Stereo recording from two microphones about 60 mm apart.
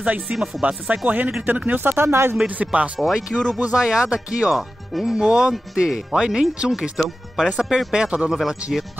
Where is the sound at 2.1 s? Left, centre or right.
Right.